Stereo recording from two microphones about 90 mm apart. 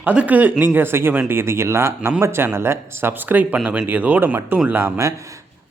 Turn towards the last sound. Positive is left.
turn(degrees=-20)  # may be behind; listen again after turning